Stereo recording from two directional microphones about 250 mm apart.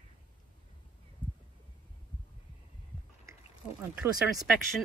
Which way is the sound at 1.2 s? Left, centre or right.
Left.